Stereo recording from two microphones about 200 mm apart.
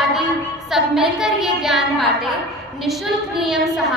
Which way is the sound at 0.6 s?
Centre (ahead or behind).